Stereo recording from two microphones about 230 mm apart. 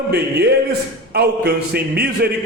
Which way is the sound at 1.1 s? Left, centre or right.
Right.